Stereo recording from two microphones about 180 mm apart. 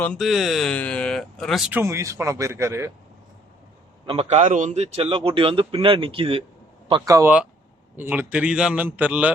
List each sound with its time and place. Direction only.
0.0 s speech: 5° left (ahead or behind)
1.7 s a man's voice: 15° right (ahead or behind)
4.0 s a man's voice: 30° right (ahead or behind)
7.1 s a man's voice: 10° right (ahead or behind)